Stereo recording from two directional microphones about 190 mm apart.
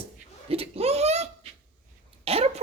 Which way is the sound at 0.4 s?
30° right (ahead or behind).